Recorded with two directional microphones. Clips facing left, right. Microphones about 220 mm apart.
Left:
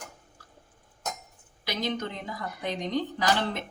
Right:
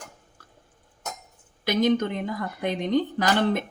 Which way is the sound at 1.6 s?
50° right (ahead or behind).